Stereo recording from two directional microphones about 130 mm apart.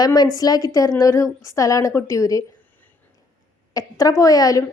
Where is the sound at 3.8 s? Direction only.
30° left (ahead or behind).